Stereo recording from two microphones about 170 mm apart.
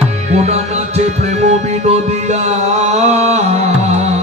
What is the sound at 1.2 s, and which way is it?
Music, 40° right (ahead or behind).